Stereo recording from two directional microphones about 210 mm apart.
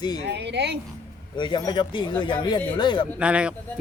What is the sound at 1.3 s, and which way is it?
Speech, 20° left (ahead or behind).